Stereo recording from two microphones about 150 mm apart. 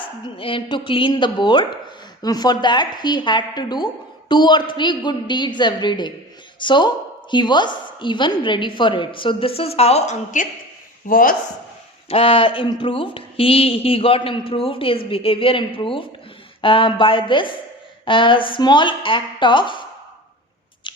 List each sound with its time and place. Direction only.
0.3 s a woman's voice: 35° left (ahead or behind); by 10.5 s 55° left (ahead or behind)
11.1 s speech: 70° left (ahead or behind)
12.0 s a woman's voice: 35° left (ahead or behind)
20.9 s scissors: 30° left (ahead or behind)